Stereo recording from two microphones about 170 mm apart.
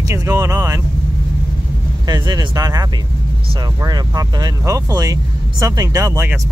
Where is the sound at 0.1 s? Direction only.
15° right (ahead or behind).